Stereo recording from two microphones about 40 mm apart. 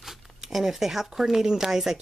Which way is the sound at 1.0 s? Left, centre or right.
Centre.